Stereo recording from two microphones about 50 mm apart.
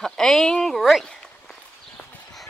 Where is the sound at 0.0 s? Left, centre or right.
Centre.